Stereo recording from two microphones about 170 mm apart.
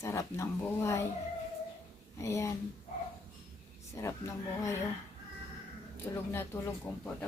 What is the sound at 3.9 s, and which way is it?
Speech, 20° left (ahead or behind).